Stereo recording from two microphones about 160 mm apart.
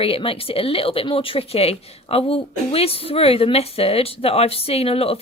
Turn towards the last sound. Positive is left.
turn(degrees=35)  # may be behind; listen again after turning